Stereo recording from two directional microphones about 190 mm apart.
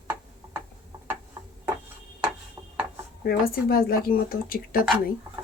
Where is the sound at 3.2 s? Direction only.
50° left (ahead or behind).